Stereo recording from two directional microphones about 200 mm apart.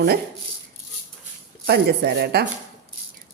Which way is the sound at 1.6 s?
55° right (ahead or behind).